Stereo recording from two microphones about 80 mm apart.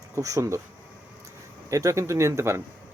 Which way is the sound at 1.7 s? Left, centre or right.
Right.